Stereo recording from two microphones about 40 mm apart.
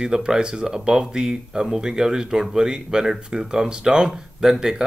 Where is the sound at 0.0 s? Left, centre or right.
Centre.